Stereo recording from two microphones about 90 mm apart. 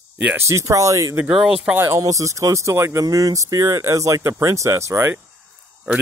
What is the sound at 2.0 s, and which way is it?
Speech, 35° right (ahead or behind).